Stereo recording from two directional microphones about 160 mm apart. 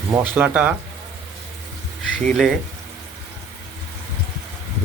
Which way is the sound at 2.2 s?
5° left (ahead or behind).